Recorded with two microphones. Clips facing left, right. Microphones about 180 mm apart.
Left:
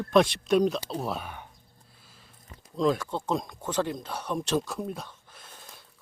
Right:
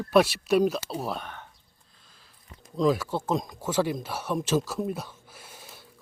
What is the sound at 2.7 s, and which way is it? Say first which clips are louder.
Speech: right 2 dB; 5° right (ahead or behind).